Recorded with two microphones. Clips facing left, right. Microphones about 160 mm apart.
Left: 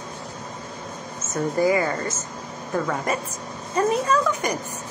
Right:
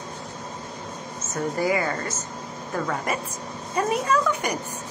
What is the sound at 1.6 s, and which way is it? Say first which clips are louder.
Speech: left 4 dB; 30° left (ahead or behind).